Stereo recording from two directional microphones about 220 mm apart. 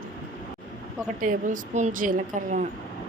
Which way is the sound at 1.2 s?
35° right (ahead or behind).